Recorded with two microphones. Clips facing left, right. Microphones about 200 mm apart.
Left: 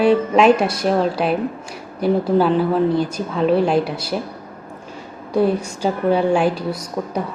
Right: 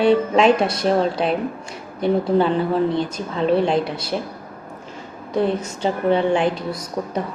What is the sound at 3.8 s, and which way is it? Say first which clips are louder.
Speech: left 1 dB; 25° right (ahead or behind).